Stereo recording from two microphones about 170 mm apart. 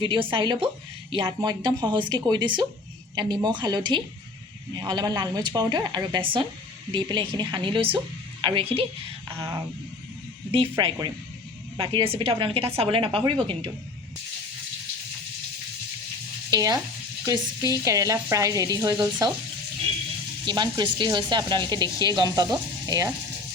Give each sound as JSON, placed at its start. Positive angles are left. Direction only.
{"t": 0.0, "sound": "speech", "side_deg": -30}
{"t": 9.3, "sound": "speech", "side_deg": -20}
{"t": 10.5, "sound": "a woman's voice", "side_deg": -30}
{"t": 16.5, "sound": "frying", "side_deg": -20}
{"t": 17.2, "sound": "speech", "side_deg": -20}
{"t": 20.5, "sound": "speech", "side_deg": -25}